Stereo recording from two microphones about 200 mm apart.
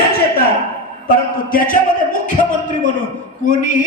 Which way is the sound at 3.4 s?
40° left (ahead or behind).